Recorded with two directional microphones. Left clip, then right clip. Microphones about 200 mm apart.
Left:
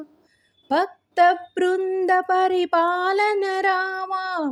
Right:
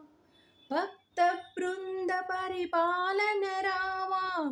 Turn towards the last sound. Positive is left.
turn(degrees=30)  # may be behind; listen again after turning